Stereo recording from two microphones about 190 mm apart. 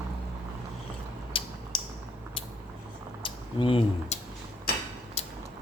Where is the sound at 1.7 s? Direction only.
25° left (ahead or behind).